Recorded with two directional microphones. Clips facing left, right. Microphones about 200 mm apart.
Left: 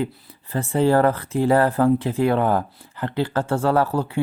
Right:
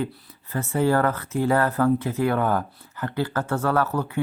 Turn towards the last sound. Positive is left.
turn(degrees=30)  # may be behind; listen again after turning